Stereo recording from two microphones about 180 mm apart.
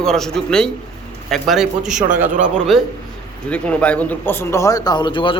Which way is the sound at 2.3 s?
45° right (ahead or behind).